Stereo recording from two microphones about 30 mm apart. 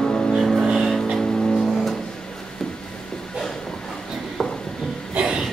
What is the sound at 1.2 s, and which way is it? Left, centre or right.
Music, centre.